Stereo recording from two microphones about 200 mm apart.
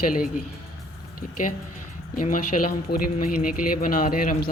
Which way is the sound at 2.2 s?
40° left (ahead or behind).